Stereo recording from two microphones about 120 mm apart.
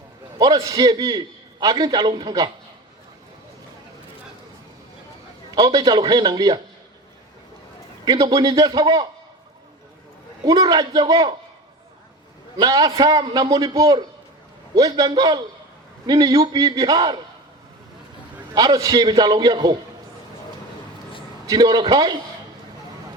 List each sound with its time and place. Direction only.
0.3 s a man's voice: 30° right (ahead or behind)
5.5 s a man's voice: 35° right (ahead or behind)
8.0 s a man's voice: 40° right (ahead or behind)
10.4 s a man's voice: 30° right (ahead or behind)
12.5 s a man's voice: 35° right (ahead or behind)
18.5 s a man's voice: 35° right (ahead or behind)
21.4 s a man's voice: 35° right (ahead or behind)